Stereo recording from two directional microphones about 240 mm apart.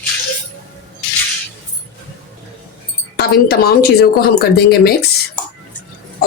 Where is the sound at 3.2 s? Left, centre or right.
Left.